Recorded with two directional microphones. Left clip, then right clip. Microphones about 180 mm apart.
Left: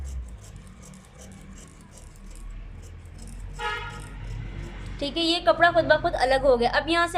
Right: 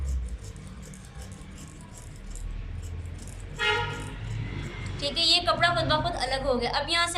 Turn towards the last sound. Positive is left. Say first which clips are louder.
# left 3 dB
turn(degrees=50)  # may be behind; listen again after turning